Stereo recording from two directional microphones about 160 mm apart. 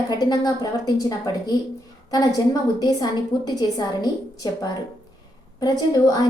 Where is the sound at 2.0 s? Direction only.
25° left (ahead or behind).